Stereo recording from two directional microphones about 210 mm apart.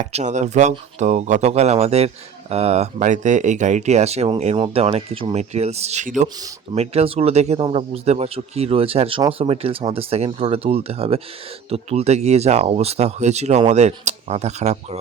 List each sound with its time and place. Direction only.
0.0 s speech: 35° right (ahead or behind)